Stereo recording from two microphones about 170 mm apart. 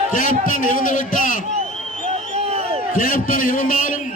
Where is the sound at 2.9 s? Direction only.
55° left (ahead or behind).